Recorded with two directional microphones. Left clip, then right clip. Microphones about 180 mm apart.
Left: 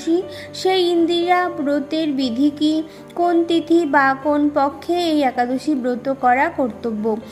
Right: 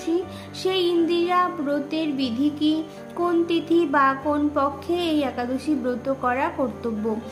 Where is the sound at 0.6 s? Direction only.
30° left (ahead or behind).